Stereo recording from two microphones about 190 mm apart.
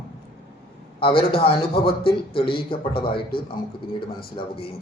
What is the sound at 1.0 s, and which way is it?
A man's voice, 30° left (ahead or behind).